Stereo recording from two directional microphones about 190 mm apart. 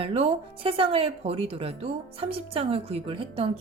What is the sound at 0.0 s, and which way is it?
A woman's voice, 30° right (ahead or behind).